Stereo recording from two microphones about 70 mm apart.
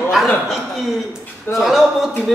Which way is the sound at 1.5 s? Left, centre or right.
Centre.